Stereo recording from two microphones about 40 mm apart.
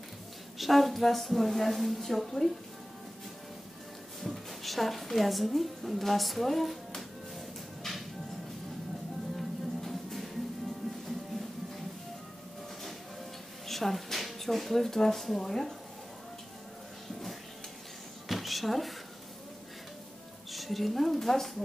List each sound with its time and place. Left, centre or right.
0.6 s a woman's voice: centre
4.2 s a woman's voice: centre
9.4 s music: centre
13.7 s speech: centre
18.3 s a sound: centre
20.5 s a woman's voice: centre